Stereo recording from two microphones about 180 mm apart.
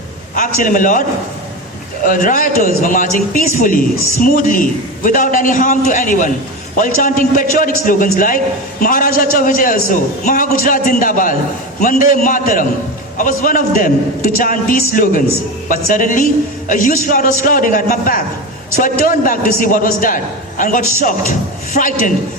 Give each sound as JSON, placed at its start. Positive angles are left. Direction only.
{"t": 0.3, "sound": "a man's voice", "side_deg": 45}
{"t": 2.0, "sound": "a man's voice", "side_deg": 50}